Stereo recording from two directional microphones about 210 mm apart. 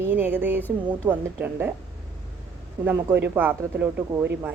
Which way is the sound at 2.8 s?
10° right (ahead or behind).